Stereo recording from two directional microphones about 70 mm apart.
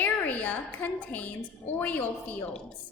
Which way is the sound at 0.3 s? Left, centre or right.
Left.